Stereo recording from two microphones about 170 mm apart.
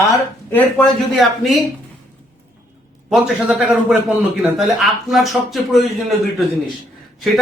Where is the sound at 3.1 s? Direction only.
5° right (ahead or behind).